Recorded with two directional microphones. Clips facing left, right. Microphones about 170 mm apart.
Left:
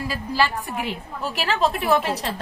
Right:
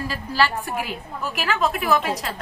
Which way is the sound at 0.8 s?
30° left (ahead or behind).